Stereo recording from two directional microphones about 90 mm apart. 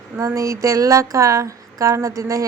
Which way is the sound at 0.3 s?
35° right (ahead or behind).